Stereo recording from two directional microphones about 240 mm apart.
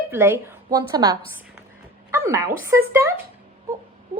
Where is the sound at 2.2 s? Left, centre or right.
Centre.